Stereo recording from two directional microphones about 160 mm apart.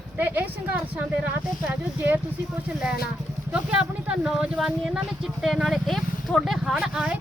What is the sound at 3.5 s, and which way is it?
Speech, 5° right (ahead or behind).